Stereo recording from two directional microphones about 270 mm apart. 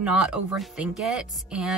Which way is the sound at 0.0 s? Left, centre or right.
Centre.